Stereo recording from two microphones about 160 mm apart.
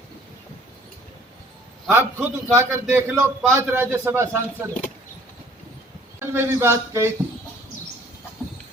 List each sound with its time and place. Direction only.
1.9 s a man's voice: 15° right (ahead or behind)
6.1 s a man's voice: 15° right (ahead or behind)